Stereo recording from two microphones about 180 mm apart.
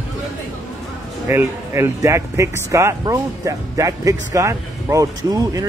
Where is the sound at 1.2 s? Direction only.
15° right (ahead or behind).